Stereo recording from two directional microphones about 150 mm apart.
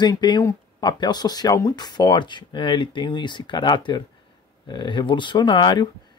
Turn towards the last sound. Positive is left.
turn(degrees=30)  # may be behind; listen again after turning